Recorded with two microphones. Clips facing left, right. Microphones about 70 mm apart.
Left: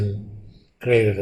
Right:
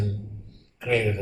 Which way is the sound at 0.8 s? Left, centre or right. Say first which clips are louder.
Left 7 dB; left.